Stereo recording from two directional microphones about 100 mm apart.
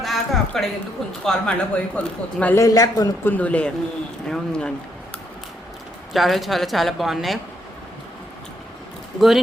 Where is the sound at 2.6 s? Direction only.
35° left (ahead or behind).